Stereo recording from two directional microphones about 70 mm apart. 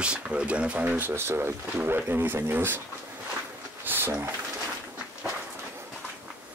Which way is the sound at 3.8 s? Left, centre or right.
Right.